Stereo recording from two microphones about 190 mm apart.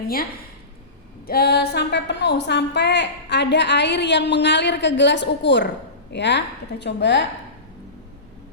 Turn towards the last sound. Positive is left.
turn(degrees=65)  # may be behind; listen again after turning